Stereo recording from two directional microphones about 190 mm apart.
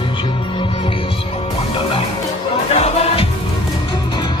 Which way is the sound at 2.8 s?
30° left (ahead or behind).